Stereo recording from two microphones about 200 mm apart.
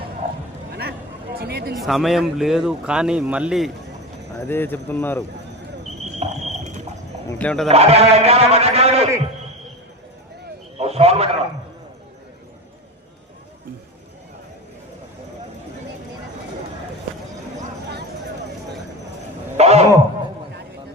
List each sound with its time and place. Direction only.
0.7 s a sound: 55° right (ahead or behind)
1.4 s speech: 50° right (ahead or behind)
1.8 s a man's voice: centre (ahead or behind)
4.4 s speech: 10° left (ahead or behind)
5.8 s cricket: 35° right (ahead or behind)
7.3 s speech: 5° left (ahead or behind)
7.7 s a man's voice: 30° right (ahead or behind)
10.8 s a man's voice: 30° right (ahead or behind)
19.5 s a sound: 30° right (ahead or behind)